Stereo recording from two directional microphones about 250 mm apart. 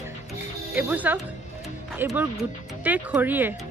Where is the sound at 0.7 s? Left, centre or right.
Centre.